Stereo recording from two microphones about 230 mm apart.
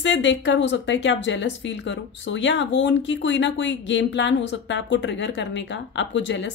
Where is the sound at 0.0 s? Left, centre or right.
Left.